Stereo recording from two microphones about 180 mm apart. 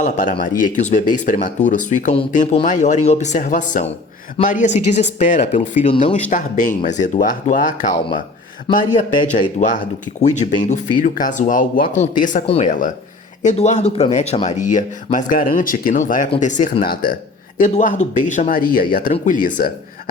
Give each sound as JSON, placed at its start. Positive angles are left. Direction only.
{"t": 0.0, "sound": "speech", "side_deg": 45}
{"t": 5.9, "sound": "speech", "side_deg": 30}
{"t": 6.3, "sound": "speech", "side_deg": 45}
{"t": 8.7, "sound": "speech", "side_deg": 25}
{"t": 10.2, "sound": "speech", "side_deg": 40}